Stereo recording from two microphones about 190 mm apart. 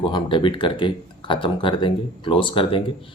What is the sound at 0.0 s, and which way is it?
Speech, 25° left (ahead or behind).